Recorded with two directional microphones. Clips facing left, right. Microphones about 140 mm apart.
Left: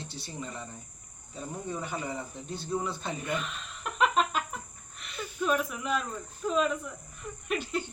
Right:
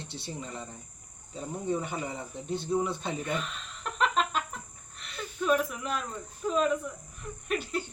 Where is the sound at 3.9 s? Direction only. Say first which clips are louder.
Left 2 dB; 5° left (ahead or behind).